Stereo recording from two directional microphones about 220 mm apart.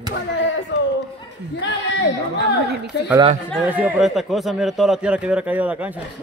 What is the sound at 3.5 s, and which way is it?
Speech, 5° right (ahead or behind).